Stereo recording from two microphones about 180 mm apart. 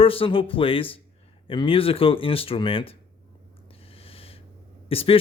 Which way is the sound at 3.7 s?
30° left (ahead or behind).